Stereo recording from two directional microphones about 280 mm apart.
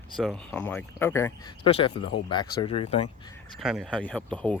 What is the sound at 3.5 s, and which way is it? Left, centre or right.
Speech, centre.